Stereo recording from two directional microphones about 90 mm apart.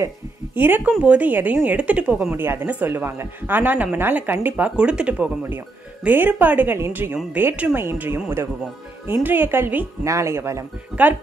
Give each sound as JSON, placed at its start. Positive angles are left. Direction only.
{"t": 0.6, "sound": "a woman's voice", "side_deg": -20}
{"t": 9.2, "sound": "a woman's voice", "side_deg": -20}
{"t": 10.0, "sound": "speech", "side_deg": -35}